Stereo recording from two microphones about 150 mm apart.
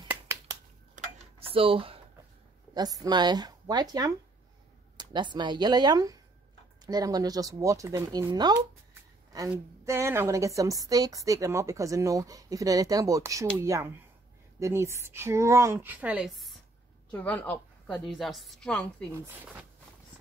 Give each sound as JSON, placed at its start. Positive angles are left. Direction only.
{"t": 1.0, "sound": "a sound", "side_deg": -55}
{"t": 1.4, "sound": "speech", "side_deg": -40}
{"t": 3.0, "sound": "a woman's voice", "side_deg": -30}
{"t": 9.8, "sound": "a woman's voice", "side_deg": -15}
{"t": 17.1, "sound": "a woman's voice", "side_deg": 10}
{"t": 19.1, "sound": "speech", "side_deg": -15}